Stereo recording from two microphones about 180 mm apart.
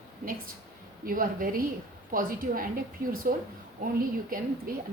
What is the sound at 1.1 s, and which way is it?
A woman's voice, 50° right (ahead or behind).